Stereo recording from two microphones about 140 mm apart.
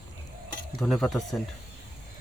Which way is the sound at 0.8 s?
Centre (ahead or behind).